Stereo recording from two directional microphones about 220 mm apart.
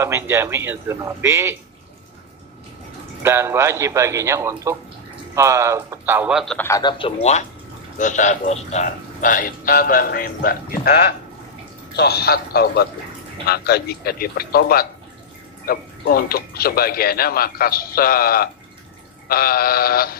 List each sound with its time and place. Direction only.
0.0 s speech: 10° right (ahead or behind)
3.2 s speech: 10° right (ahead or behind)
6.7 s speech: 20° left (ahead or behind); by 20.2 s 45° left (ahead or behind)